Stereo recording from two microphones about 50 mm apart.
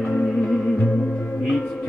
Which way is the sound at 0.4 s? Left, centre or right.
Centre.